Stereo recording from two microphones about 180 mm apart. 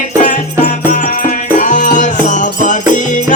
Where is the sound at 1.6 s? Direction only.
45° left (ahead or behind).